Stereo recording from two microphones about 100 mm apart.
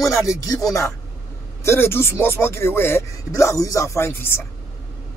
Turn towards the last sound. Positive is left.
turn(degrees=25)  # may be behind; listen again after turning